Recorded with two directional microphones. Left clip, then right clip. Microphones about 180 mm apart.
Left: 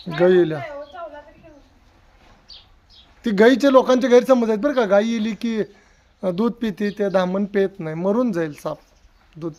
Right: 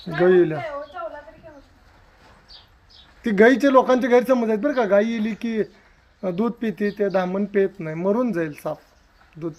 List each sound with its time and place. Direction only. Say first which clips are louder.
0.2 s speech: left 1 dB; 25° left (ahead or behind)
3.2 s speech: left 1 dB; 20° left (ahead or behind)